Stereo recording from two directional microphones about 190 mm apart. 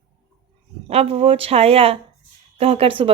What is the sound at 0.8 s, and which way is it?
Speech, 30° right (ahead or behind).